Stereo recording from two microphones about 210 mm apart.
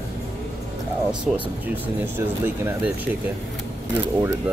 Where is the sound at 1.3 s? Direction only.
Centre (ahead or behind).